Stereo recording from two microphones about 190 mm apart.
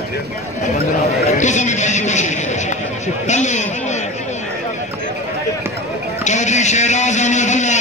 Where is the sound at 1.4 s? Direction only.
40° left (ahead or behind).